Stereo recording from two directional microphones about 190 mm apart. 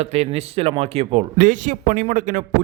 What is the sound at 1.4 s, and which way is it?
A man's voice, 45° right (ahead or behind).